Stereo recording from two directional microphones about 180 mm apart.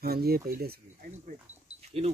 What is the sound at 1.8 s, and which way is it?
Livestock, 35° right (ahead or behind).